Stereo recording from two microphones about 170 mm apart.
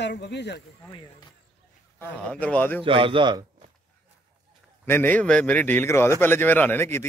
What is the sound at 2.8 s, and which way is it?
Speech, 30° right (ahead or behind).